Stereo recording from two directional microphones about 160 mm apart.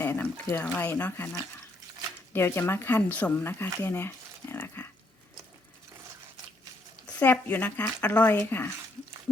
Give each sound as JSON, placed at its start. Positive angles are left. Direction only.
{"t": 0.0, "sound": "speech", "side_deg": 15}
{"t": 2.3, "sound": "speech", "side_deg": 15}
{"t": 7.1, "sound": "speech", "side_deg": 10}